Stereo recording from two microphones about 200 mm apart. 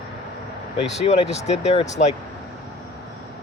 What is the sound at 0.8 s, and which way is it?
Speech, 30° left (ahead or behind).